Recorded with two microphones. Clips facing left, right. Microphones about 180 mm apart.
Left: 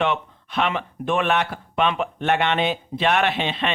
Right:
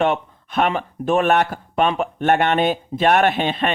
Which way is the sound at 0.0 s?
45° right (ahead or behind).